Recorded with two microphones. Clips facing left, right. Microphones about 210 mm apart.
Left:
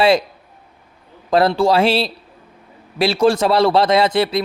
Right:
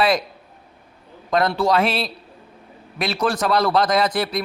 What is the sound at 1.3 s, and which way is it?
Speech, 30° left (ahead or behind).